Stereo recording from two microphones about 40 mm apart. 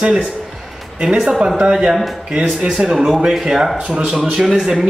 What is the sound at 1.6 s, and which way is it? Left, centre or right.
A man's voice, centre.